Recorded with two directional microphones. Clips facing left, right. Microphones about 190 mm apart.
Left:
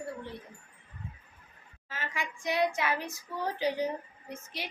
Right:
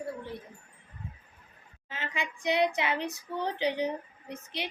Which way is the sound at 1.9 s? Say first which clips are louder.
Right 1 dB; 20° right (ahead or behind).